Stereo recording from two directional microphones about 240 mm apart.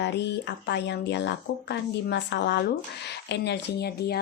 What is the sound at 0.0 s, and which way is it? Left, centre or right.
Speech, left.